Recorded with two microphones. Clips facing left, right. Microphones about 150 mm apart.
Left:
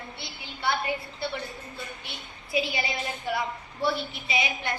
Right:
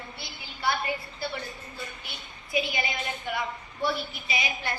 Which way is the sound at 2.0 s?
25° left (ahead or behind).